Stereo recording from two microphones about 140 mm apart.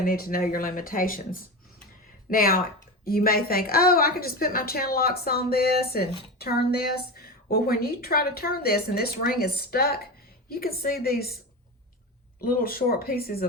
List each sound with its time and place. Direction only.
0.0 s a woman's voice: 90° left
12.5 s a woman's voice: 90° left